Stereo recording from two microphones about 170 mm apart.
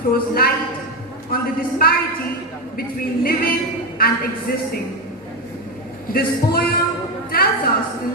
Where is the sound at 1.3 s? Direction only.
60° left (ahead or behind).